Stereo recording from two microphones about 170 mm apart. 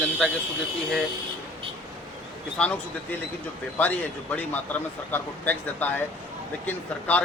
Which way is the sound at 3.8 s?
10° left (ahead or behind).